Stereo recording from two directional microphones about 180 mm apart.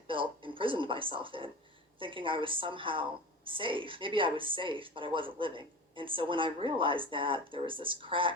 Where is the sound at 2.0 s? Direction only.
30° right (ahead or behind).